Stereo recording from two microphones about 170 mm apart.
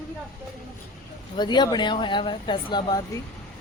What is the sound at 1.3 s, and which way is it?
Speech, 25° left (ahead or behind).